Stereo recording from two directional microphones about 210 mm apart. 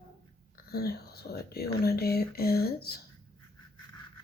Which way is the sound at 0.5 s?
50° left (ahead or behind).